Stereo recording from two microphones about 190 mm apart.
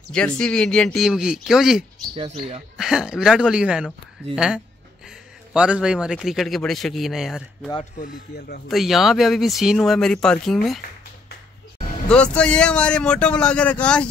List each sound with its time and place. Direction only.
0.1 s a man's voice: 5° left (ahead or behind)
2.1 s speech: 30° right (ahead or behind)
2.8 s a man's voice: 5° right (ahead or behind)
5.5 s a man's voice: 5° right (ahead or behind)
12.1 s a man's voice: 5° left (ahead or behind)